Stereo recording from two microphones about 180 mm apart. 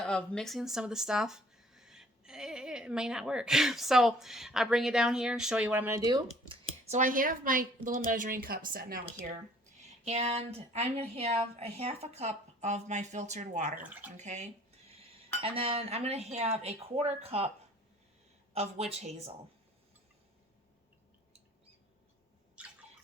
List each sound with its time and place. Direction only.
0.0 s speech: 5° left (ahead or behind)
6.5 s speech: 45° right (ahead or behind)
10.0 s a woman's voice: 35° right (ahead or behind)
13.8 s speech: 10° right (ahead or behind)
14.2 s a woman's voice: 40° right (ahead or behind)
18.5 s a woman's voice: 35° right (ahead or behind)